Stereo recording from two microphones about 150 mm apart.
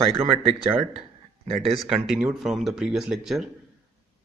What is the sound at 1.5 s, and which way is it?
Speech, centre (ahead or behind).